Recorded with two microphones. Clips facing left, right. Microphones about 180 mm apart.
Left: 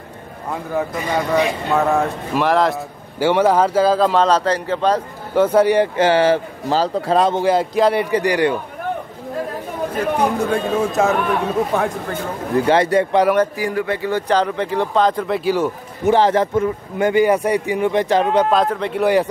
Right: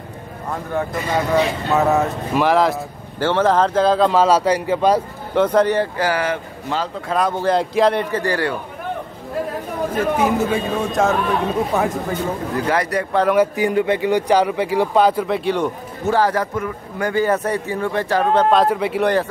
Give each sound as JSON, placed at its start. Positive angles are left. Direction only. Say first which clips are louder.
{"t": 0.5, "sound": "speech", "louder": "left 1 dB", "side_deg": 5}
{"t": 3.2, "sound": "speech", "louder": "left 2 dB", "side_deg": 10}
{"t": 5.3, "sound": "speech", "louder": "left 2 dB", "side_deg": 5}
{"t": 5.9, "sound": "a man's voice", "louder": "left 6 dB", "side_deg": 25}
{"t": 7.4, "sound": "speech", "louder": "left 1 dB", "side_deg": 0}
{"t": 9.9, "sound": "speech", "louder": "right 1 dB", "side_deg": -5}
{"t": 12.6, "sound": "a man's voice", "louder": "left 6 dB", "side_deg": 25}
{"t": 13.6, "sound": "speech", "louder": "right 3 dB", "side_deg": -20}
{"t": 16.1, "sound": "a man's voice", "louder": "left 3 dB", "side_deg": 25}
{"t": 18.5, "sound": "speech", "louder": "right 2 dB", "side_deg": -5}